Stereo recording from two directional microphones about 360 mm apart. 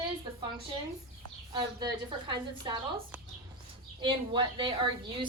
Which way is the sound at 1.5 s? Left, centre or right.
Centre.